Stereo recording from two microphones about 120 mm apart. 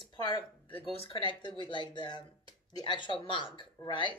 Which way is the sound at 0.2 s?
40° left (ahead or behind).